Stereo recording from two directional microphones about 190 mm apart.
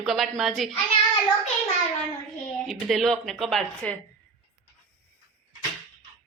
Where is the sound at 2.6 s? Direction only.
Centre (ahead or behind).